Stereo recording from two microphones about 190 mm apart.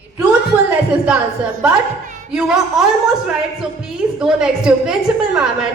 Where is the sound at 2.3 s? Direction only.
Centre (ahead or behind).